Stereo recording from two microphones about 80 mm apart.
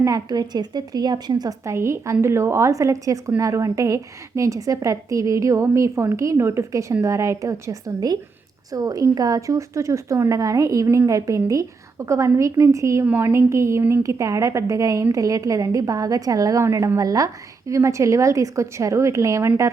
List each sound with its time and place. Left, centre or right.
0.0 s a woman's voice: right
1.6 s a woman's voice: right